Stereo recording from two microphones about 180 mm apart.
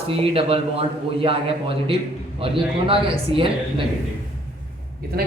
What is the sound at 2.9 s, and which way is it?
Speech, 30° right (ahead or behind).